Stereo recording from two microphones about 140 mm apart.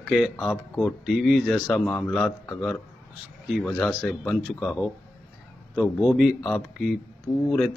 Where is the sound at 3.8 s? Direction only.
Centre (ahead or behind).